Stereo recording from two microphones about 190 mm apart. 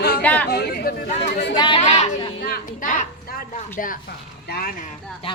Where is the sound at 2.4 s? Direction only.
50° left (ahead or behind).